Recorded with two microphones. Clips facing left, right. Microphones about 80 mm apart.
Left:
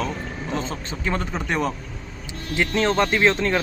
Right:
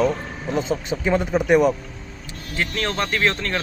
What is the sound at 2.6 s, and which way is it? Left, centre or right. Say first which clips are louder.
Speech: left 4 dB; centre.